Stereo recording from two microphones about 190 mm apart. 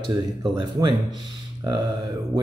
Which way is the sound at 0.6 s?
25° right (ahead or behind).